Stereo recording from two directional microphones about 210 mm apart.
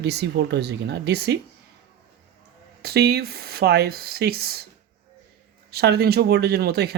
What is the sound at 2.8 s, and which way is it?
Speech, 50° right (ahead or behind).